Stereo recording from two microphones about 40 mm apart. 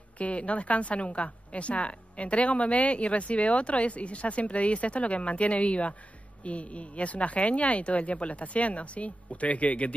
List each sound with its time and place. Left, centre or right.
0.2 s a woman's voice: left